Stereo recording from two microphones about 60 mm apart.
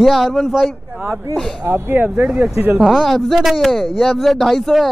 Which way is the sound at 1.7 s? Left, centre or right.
Right.